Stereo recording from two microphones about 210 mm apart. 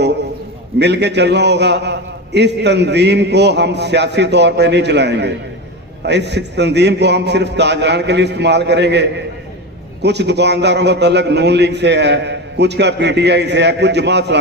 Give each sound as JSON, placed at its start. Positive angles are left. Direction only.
{"t": 0.8, "sound": "a man's voice", "side_deg": -55}